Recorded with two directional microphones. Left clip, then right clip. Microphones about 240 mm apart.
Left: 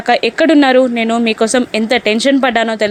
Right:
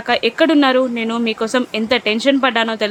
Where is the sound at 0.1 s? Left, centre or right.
Centre.